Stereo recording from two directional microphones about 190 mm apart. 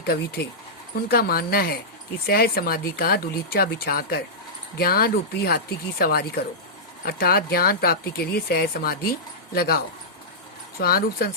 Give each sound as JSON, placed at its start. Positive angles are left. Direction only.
{"t": 0.0, "sound": "speech", "side_deg": 55}